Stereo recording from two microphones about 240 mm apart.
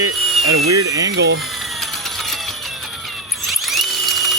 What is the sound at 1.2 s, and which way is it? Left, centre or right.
Speech, right.